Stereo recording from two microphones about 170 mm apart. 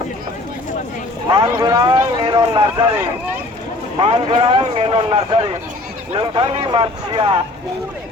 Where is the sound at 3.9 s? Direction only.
30° right (ahead or behind).